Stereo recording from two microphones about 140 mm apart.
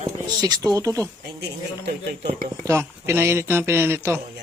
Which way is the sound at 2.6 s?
20° right (ahead or behind).